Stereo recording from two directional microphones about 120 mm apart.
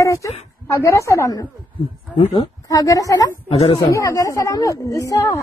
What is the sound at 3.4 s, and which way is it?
Speech, 60° left (ahead or behind).